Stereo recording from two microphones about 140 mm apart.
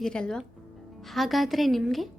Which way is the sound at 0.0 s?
5° left (ahead or behind).